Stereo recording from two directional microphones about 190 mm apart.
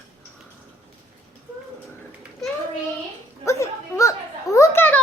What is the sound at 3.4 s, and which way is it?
A child's voice, 15° left (ahead or behind).